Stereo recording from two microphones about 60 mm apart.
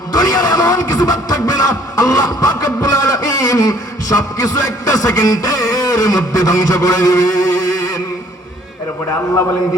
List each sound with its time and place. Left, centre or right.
0.1 s speech: left